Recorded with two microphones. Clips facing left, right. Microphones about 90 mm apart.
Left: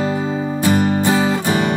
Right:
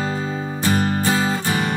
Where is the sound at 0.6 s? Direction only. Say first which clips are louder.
Left 4 dB; 15° left (ahead or behind).